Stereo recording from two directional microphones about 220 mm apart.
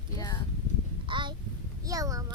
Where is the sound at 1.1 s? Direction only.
20° right (ahead or behind).